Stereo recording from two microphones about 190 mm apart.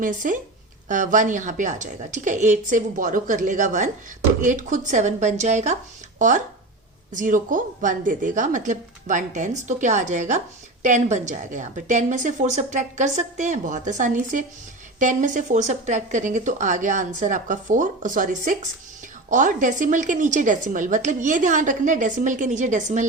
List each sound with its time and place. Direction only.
0.0 s a woman's voice: 45° right (ahead or behind)